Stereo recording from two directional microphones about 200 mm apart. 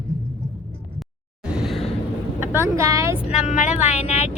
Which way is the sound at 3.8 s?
35° left (ahead or behind).